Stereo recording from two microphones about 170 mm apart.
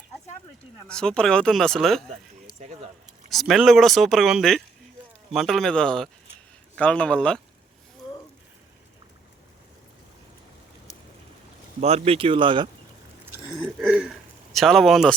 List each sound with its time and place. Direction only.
0.9 s speech: 5° left (ahead or behind)
2.6 s speech: 40° right (ahead or behind)
3.2 s speech: centre (ahead or behind)
11.8 s speech: 40° right (ahead or behind)
13.8 s speech: 5° right (ahead or behind)